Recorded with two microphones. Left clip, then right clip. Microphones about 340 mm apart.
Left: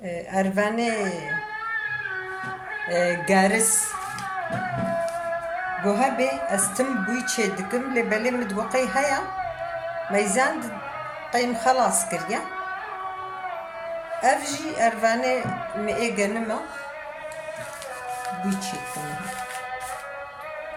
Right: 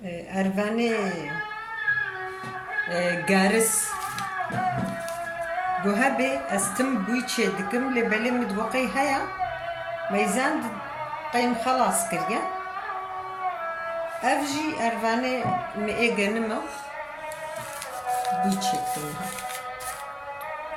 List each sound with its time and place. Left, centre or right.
0.3 s speech: left
2.9 s speech: centre
5.9 s speech: centre
14.2 s speech: centre